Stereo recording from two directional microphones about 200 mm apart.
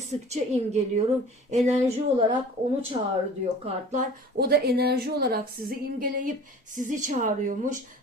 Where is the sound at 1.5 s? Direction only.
35° right (ahead or behind).